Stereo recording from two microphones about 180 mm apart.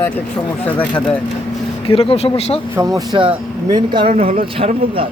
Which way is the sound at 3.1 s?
25° right (ahead or behind).